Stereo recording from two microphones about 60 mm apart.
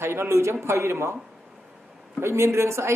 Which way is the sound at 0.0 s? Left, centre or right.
Right.